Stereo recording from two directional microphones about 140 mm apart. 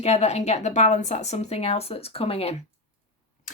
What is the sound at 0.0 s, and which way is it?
A woman's voice, 50° left (ahead or behind).